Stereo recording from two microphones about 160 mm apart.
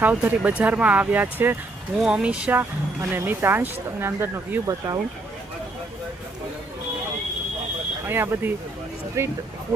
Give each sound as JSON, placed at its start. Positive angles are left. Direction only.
{"t": 0.0, "sound": "speech", "side_deg": -10}
{"t": 8.0, "sound": "speech", "side_deg": -15}